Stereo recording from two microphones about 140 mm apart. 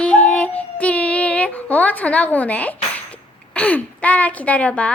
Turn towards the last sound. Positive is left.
turn(degrees=10)  # may be behind; listen again after turning